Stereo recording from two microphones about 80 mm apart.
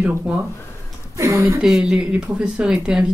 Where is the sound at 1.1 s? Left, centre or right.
Right.